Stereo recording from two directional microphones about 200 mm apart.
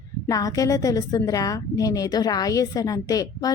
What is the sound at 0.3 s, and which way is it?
A woman's voice, 15° left (ahead or behind).